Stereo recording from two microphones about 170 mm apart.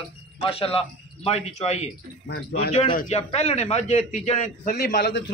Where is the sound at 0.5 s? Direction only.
35° left (ahead or behind).